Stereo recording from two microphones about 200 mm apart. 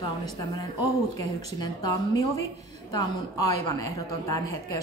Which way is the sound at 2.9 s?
15° left (ahead or behind).